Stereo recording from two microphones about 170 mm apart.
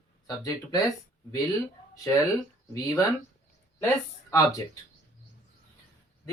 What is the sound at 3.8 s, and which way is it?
Speech, 15° left (ahead or behind).